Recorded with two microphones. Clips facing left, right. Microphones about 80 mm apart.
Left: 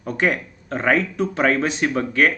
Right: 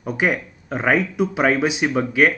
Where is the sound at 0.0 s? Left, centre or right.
Centre.